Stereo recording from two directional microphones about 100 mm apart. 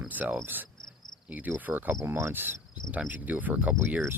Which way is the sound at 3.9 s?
20° right (ahead or behind).